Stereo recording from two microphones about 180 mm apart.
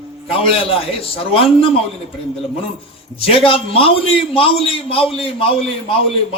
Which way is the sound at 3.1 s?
30° left (ahead or behind).